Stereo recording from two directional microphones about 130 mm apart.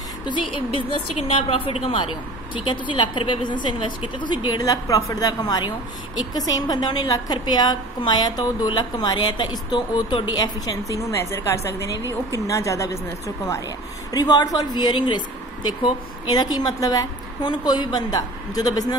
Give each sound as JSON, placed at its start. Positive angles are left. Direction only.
{"t": 0.3, "sound": "a woman's voice", "side_deg": 40}
{"t": 12.0, "sound": "speech", "side_deg": -20}
{"t": 12.4, "sound": "a woman's voice", "side_deg": 25}
{"t": 14.1, "sound": "a woman's voice", "side_deg": 30}